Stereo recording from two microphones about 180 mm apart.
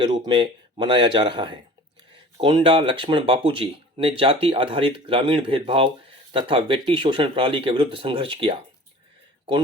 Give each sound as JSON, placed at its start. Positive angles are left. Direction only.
{"t": 0.0, "sound": "speech", "side_deg": -25}